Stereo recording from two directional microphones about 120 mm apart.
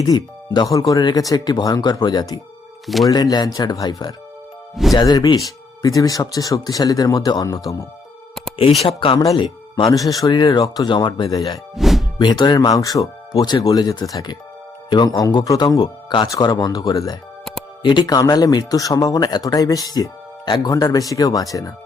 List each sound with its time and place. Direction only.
0.0 s speech: 35° left (ahead or behind)
2.8 s speech: centre (ahead or behind)
3.1 s speech: 35° left (ahead or behind)
4.7 s speech: centre (ahead or behind)
4.9 s speech: 35° left (ahead or behind)
8.8 s speech: 45° left (ahead or behind)
10.1 s speech: 30° left (ahead or behind)
11.7 s music: centre (ahead or behind)
12.2 s speech: 35° left (ahead or behind)